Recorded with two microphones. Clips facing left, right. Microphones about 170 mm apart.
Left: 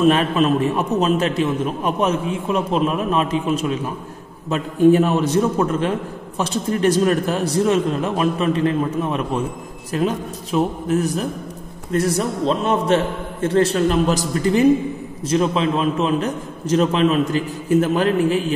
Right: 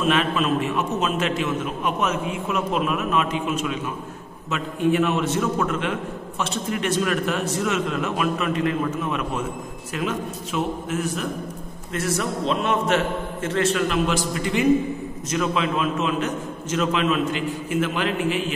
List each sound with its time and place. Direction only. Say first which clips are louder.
0.0 s a man's voice: left 6 dB; 40° left (ahead or behind)